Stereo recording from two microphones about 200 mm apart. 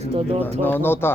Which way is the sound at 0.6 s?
10° left (ahead or behind).